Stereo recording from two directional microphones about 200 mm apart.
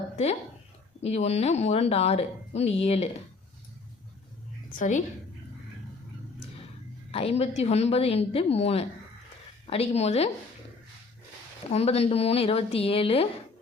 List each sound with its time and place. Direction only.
1.0 s a woman's voice: 30° left (ahead or behind)
4.8 s a woman's voice: 40° left (ahead or behind)
7.1 s a woman's voice: 30° left (ahead or behind)
11.7 s a woman's voice: 30° left (ahead or behind)